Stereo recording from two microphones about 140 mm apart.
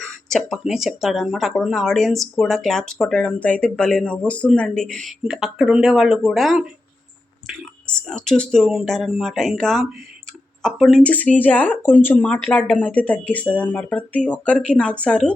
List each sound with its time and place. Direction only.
0.3 s speech: centre (ahead or behind)